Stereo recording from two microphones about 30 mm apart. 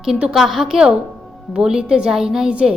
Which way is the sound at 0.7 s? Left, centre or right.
Right.